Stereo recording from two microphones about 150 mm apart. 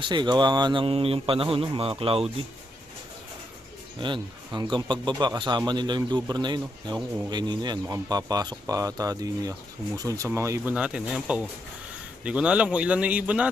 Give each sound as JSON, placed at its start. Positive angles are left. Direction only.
{"t": 0.0, "sound": "speech", "side_deg": -30}
{"t": 4.0, "sound": "a man's voice", "side_deg": -30}
{"t": 10.8, "sound": "speech", "side_deg": -5}